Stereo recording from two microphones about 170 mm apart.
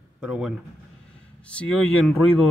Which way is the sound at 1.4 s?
5° left (ahead or behind).